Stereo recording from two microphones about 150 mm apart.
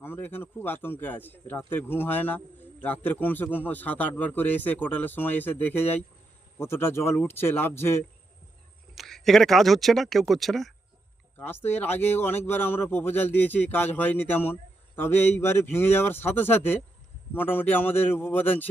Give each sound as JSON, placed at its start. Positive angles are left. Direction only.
{"t": 0.0, "sound": "speech", "side_deg": 15}
{"t": 9.0, "sound": "speech", "side_deg": 0}
{"t": 11.3, "sound": "speech", "side_deg": 15}